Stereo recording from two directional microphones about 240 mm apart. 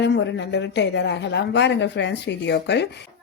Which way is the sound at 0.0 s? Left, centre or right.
Left.